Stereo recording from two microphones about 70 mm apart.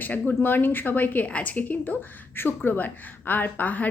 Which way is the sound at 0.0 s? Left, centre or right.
Left.